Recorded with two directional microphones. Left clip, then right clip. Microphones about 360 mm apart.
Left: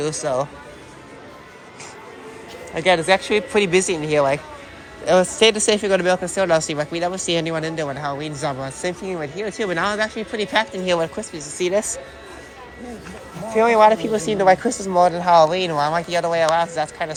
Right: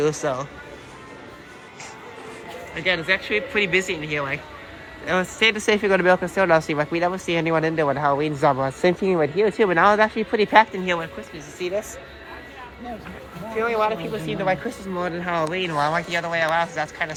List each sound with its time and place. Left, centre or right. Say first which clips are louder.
0.0 s speech: right 1 dB; centre
2.7 s speech: left 5 dB; centre
11.6 s speech: left 6 dB; left
13.6 s speech: left 8 dB; centre
15.2 s speech: left 10 dB; centre